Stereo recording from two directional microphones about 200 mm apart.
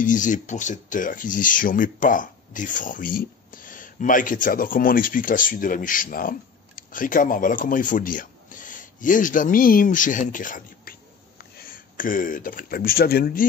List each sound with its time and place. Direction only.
0.0 s speech: 40° left (ahead or behind)